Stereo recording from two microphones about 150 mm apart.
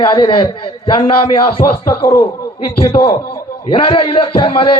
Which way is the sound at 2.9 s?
35° left (ahead or behind).